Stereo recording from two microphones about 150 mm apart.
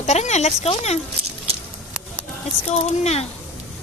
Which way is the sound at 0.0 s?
50° left (ahead or behind).